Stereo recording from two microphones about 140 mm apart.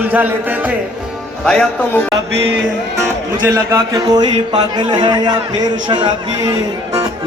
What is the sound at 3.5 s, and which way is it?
Mantra, 25° right (ahead or behind).